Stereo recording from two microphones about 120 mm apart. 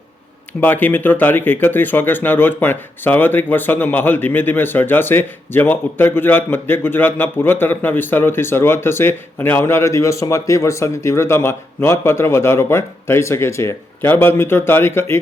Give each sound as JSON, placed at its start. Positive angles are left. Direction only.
{"t": 0.6, "sound": "speech", "side_deg": 15}